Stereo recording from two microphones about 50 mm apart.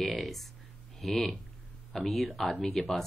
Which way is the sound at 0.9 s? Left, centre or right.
Centre.